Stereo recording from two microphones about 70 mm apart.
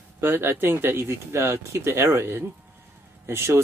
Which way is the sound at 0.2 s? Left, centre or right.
Right.